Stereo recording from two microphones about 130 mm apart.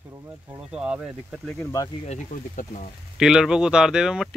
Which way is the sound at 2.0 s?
75° left (ahead or behind).